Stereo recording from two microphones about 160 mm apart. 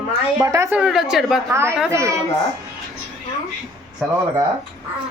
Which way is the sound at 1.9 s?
20° right (ahead or behind).